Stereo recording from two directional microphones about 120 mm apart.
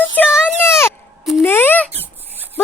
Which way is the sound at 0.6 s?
20° left (ahead or behind).